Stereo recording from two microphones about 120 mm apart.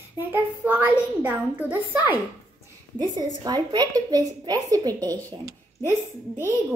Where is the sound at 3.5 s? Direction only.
35° right (ahead or behind).